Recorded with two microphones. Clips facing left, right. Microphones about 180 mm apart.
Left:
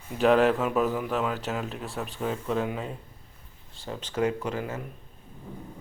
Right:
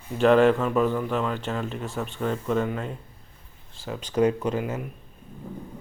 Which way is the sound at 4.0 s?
15° right (ahead or behind).